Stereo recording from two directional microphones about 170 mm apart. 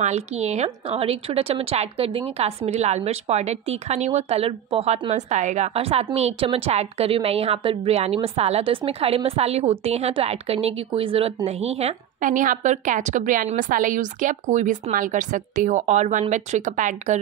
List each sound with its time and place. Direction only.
0.0 s a woman's voice: 40° right (ahead or behind)
5.1 s a woman's voice: 45° right (ahead or behind)